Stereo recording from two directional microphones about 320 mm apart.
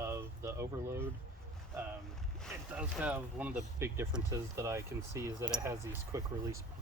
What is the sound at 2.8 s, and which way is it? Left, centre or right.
Speech, centre.